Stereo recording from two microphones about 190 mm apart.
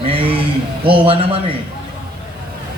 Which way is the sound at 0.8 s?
30° right (ahead or behind).